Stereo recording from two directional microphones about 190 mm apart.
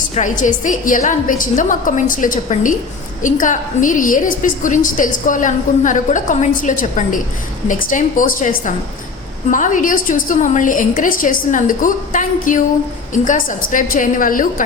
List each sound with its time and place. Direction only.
0.1 s a woman's voice: 40° left (ahead or behind)